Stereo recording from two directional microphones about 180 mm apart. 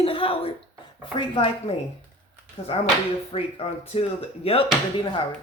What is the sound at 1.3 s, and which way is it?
Speech, 30° left (ahead or behind).